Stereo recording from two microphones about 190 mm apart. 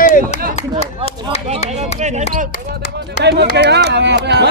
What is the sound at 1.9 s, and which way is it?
Speech, 40° right (ahead or behind).